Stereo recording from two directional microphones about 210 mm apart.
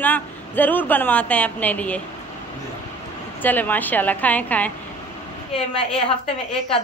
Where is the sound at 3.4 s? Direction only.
10° left (ahead or behind).